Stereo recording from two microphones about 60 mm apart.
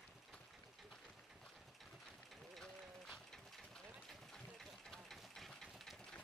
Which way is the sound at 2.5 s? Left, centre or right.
Centre.